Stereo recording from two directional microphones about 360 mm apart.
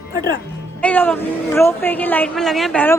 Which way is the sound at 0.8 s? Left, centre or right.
Centre.